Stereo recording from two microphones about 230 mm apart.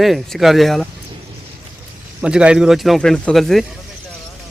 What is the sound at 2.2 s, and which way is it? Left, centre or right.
A man's voice, centre.